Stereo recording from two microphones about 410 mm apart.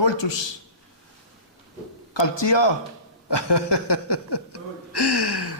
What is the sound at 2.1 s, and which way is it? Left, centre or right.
Speech, left.